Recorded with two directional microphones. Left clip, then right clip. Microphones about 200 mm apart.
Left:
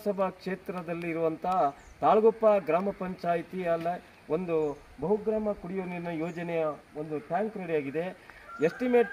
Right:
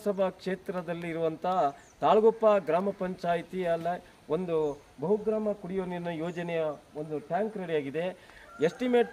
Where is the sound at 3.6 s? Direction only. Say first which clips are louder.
Even; 15° right (ahead or behind).